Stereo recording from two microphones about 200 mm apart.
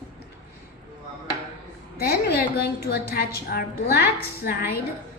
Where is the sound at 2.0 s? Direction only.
50° left (ahead or behind).